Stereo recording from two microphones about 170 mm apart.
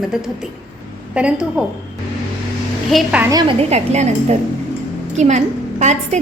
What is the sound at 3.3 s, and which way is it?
A woman's voice, 35° right (ahead or behind).